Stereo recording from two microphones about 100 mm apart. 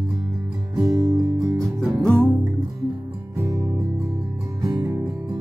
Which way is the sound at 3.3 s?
35° right (ahead or behind).